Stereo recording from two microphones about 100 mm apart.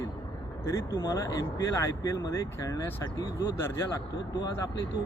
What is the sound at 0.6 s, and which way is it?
Speech, 30° left (ahead or behind).